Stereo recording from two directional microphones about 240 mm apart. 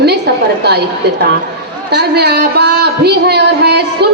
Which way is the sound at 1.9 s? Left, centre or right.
Right.